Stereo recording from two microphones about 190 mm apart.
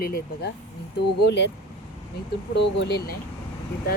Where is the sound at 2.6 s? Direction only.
60° left (ahead or behind).